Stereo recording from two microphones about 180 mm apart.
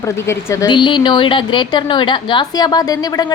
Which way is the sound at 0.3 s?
20° left (ahead or behind).